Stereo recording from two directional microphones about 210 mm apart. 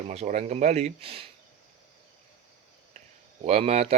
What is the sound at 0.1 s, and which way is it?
Speech, 30° right (ahead or behind).